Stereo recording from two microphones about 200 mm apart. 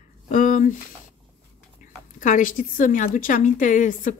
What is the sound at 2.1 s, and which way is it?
Speech, 40° left (ahead or behind).